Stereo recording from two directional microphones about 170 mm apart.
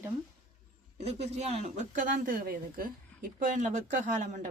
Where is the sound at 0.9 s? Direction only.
40° right (ahead or behind).